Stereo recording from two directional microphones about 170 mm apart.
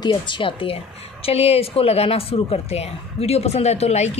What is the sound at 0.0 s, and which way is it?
Speech, 30° left (ahead or behind).